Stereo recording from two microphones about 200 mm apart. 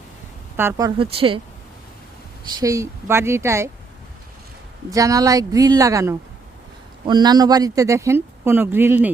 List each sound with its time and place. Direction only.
0.5 s speech: 10° right (ahead or behind); by 1.4 s 25° right (ahead or behind)
2.6 s speech: 15° right (ahead or behind)
4.9 s speech: 15° right (ahead or behind)